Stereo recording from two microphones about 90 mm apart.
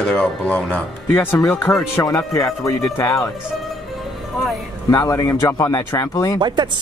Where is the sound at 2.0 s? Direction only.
35° left (ahead or behind).